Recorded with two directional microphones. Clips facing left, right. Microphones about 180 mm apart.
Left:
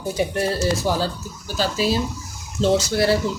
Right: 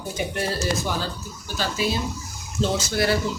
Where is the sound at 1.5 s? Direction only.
35° left (ahead or behind).